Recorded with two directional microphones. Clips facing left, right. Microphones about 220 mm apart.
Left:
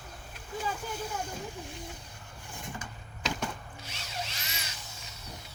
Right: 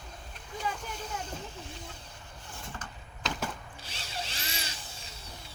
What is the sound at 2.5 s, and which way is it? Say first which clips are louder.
Vehicle: left 3 dB; 15° left (ahead or behind).